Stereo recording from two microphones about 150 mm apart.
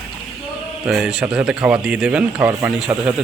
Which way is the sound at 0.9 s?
5° right (ahead or behind).